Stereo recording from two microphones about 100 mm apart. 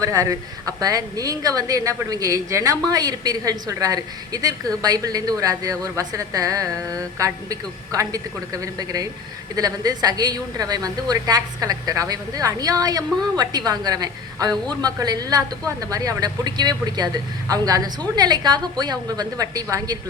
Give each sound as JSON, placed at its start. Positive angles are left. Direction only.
{"t": 0.0, "sound": "a woman's voice", "side_deg": -35}